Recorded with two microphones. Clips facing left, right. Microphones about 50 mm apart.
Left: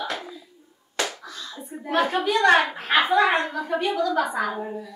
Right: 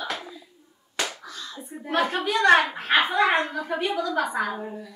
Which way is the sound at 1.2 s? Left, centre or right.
Right.